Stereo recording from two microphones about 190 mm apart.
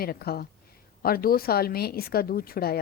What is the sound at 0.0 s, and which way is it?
A woman's voice, 55° left (ahead or behind).